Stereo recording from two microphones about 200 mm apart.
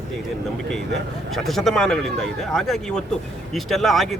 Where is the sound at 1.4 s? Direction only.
Centre (ahead or behind).